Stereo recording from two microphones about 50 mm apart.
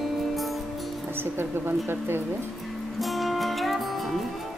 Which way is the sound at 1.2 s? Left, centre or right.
Right.